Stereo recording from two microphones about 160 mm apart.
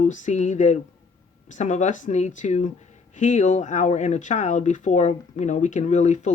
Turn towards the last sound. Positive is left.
turn(degrees=50)  # may be behind; listen again after turning